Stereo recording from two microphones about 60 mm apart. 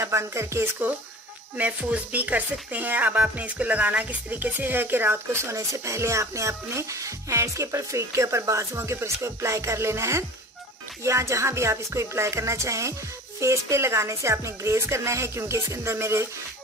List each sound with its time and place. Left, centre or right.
0.0 s speech: right
1.6 s speech: right